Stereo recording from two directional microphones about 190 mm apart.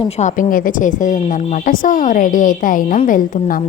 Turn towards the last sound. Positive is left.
turn(degrees=45)  # may be behind; listen again after turning